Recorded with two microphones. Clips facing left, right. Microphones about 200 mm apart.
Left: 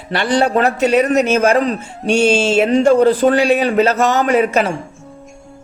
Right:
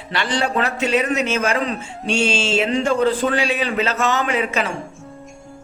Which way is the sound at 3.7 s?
40° left (ahead or behind).